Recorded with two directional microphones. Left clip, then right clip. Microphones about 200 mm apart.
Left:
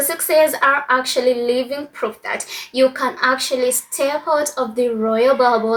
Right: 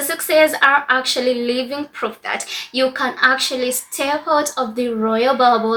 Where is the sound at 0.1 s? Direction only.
Centre (ahead or behind).